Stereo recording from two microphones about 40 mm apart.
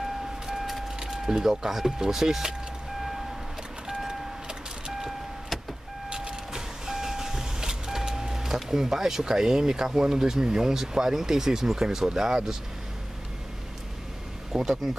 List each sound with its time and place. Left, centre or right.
0.6 s vehicle: centre
0.9 s speech: centre
3.8 s vehicle: centre
14.5 s speech: centre